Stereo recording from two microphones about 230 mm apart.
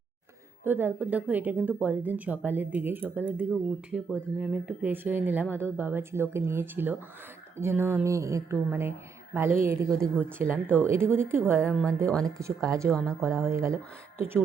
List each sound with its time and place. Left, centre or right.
0.6 s speech: centre